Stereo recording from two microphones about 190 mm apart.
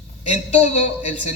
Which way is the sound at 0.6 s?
35° left (ahead or behind).